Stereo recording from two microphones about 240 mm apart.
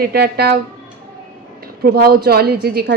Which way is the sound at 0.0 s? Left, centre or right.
Right.